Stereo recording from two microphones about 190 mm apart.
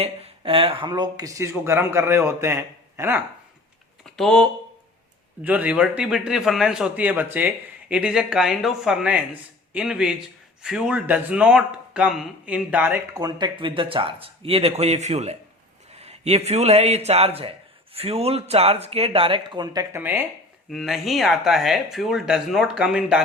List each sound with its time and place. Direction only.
0.0 s speech: 30° right (ahead or behind); by 3.2 s 10° right (ahead or behind)
4.0 s a man's voice: centre (ahead or behind)
13.1 s speech: 20° right (ahead or behind)
20.7 s a man's voice: centre (ahead or behind)